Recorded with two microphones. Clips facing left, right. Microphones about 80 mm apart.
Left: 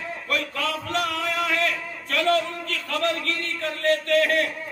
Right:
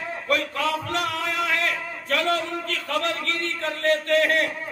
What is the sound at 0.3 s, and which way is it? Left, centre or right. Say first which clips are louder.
A man's voice: right 3 dB; right.